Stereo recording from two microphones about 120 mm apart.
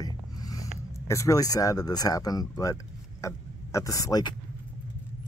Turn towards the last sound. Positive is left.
turn(degrees=30)  # may be behind; listen again after turning